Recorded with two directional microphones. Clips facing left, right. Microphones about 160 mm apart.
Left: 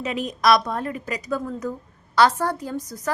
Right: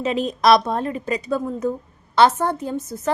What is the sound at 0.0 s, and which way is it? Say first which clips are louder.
A woman's voice: right 4 dB; 30° right (ahead or behind).